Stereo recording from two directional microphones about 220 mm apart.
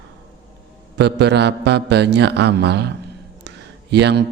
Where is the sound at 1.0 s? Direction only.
50° right (ahead or behind).